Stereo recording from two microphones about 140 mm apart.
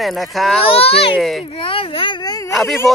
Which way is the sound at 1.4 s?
40° left (ahead or behind).